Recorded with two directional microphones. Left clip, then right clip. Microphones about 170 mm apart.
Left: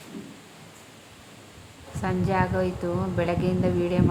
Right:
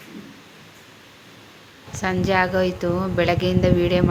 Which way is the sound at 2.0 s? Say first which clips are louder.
Right 6 dB; 15° right (ahead or behind).